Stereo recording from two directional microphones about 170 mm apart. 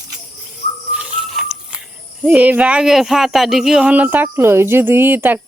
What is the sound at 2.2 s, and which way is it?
A woman's voice, 5° right (ahead or behind).